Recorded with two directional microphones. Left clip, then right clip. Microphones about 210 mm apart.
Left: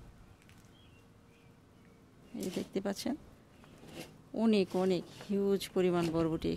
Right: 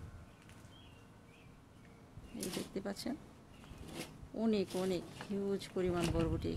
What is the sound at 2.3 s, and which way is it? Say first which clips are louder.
Speech: left 5 dB; 40° left (ahead or behind).